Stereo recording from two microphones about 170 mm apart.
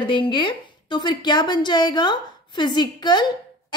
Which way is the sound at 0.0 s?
30° left (ahead or behind).